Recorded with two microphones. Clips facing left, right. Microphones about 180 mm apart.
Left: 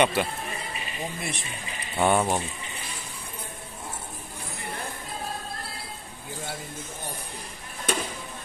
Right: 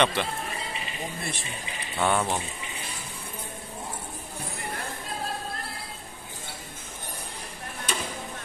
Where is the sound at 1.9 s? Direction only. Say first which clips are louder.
Left 3 dB; 15° left (ahead or behind).